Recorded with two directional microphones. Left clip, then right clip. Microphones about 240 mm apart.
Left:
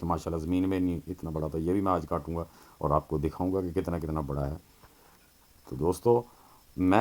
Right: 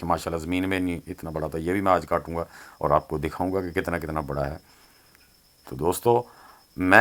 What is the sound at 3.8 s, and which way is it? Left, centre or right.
Speech, centre.